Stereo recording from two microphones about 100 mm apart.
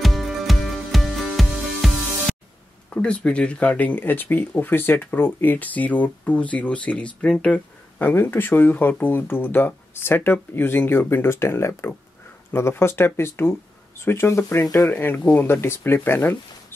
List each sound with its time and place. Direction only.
0.0 s music: centre (ahead or behind)
2.9 s speech: 10° left (ahead or behind); by 14.9 s 35° left (ahead or behind)
14.9 s speech: 20° left (ahead or behind)